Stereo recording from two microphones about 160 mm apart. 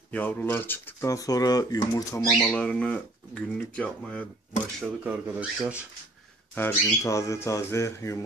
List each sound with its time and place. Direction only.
0.1 s speech: 10° left (ahead or behind)
2.4 s speech: 5° left (ahead or behind)
5.0 s speech: 10° right (ahead or behind)
6.5 s speech: 15° left (ahead or behind)